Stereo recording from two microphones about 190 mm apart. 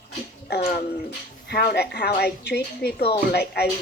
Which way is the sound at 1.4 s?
60° left (ahead or behind).